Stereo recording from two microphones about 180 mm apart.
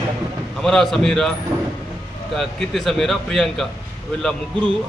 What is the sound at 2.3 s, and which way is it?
Speech, centre (ahead or behind).